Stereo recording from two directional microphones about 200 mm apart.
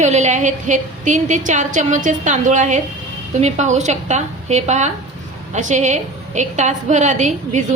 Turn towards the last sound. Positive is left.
turn(degrees=-35)  # may be behind; listen again after turning